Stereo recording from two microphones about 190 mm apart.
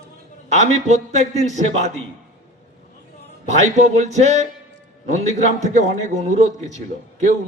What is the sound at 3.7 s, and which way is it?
Speech, 35° right (ahead or behind).